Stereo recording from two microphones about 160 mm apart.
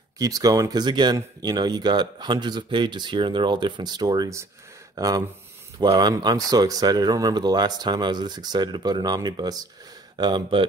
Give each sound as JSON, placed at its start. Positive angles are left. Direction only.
{"t": 0.2, "sound": "speech", "side_deg": -20}